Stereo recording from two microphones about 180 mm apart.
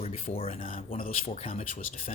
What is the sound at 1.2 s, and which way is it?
Speech, 35° left (ahead or behind).